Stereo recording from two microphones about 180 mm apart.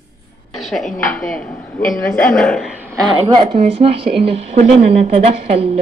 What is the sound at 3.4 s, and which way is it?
A woman's voice, 30° right (ahead or behind).